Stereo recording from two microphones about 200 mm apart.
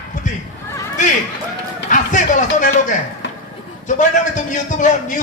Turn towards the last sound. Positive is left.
turn(degrees=40)  # may be behind; listen again after turning